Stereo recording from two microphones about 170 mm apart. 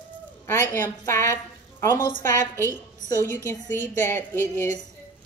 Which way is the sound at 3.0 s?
15° left (ahead or behind).